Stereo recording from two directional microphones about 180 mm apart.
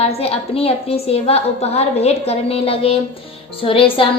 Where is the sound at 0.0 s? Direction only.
35° left (ahead or behind).